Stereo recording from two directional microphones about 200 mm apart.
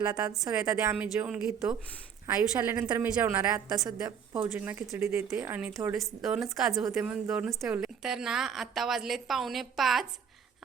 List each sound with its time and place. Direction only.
0.1 s speech: 20° right (ahead or behind)
0.9 s a woman's voice: 5° right (ahead or behind)